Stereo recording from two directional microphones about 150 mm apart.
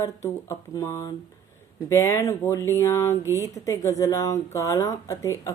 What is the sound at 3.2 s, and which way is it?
Speech, 20° right (ahead or behind).